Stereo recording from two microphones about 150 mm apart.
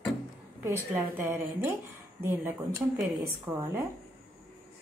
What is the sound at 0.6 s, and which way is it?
Speech, 15° right (ahead or behind).